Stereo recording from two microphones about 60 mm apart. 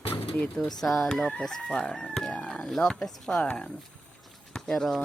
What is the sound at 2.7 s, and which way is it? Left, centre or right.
Chicken, centre.